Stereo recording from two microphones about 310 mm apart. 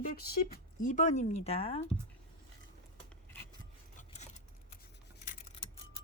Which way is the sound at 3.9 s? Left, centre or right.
Left.